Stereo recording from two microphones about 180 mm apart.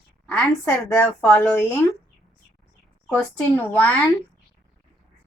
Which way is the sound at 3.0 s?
10° left (ahead or behind).